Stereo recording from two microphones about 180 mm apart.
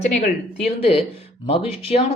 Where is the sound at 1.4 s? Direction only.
30° left (ahead or behind).